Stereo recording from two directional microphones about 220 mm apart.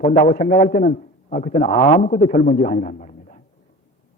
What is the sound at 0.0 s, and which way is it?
A man's voice, 35° left (ahead or behind).